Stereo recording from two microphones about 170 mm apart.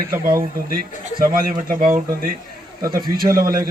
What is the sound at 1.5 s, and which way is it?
A man's voice, 50° right (ahead or behind).